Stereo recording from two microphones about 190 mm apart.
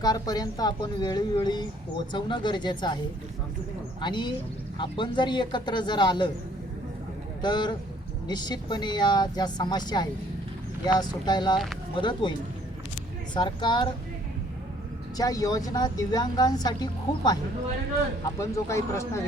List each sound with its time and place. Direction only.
0.0 s a woman's voice: 20° left (ahead or behind)
4.0 s a woman's voice: 25° left (ahead or behind)
7.4 s a woman's voice: 25° left (ahead or behind)
13.3 s a woman's voice: 25° left (ahead or behind)
15.2 s a woman's voice: 20° left (ahead or behind)
18.3 s speech: 15° left (ahead or behind)